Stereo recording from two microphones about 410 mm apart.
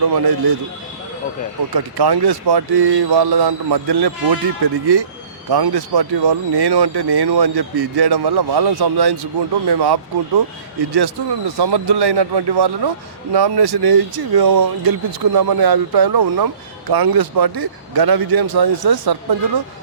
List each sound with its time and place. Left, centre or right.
0.1 s speech: right
1.7 s a man's voice: right